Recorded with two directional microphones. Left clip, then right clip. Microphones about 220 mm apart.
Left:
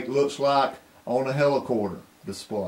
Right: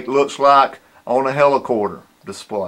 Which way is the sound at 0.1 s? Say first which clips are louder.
Right 10 dB; centre (ahead or behind).